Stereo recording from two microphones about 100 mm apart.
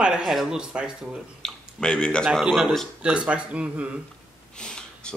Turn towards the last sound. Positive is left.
turn(degrees=10)  # may be behind; listen again after turning